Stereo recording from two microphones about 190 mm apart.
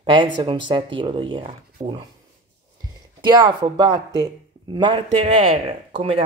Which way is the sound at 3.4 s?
25° right (ahead or behind).